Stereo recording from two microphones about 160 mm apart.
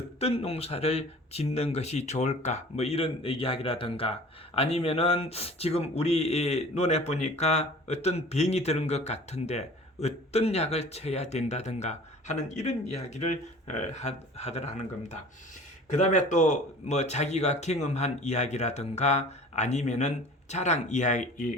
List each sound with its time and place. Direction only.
0.2 s speech: 40° left (ahead or behind)
15.9 s speech: 50° left (ahead or behind)